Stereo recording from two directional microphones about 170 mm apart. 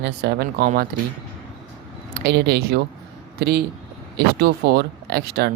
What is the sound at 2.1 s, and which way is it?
Speech, 70° right (ahead or behind).